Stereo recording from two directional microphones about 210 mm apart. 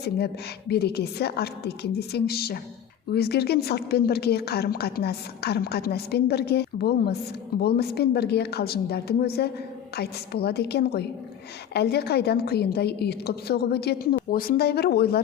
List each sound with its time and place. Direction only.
0.7 s a woman's voice: 50° left (ahead or behind)